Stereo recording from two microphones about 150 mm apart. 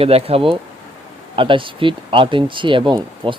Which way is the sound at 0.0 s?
40° right (ahead or behind).